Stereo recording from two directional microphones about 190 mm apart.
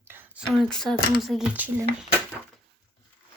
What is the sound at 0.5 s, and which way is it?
Speech, centre (ahead or behind).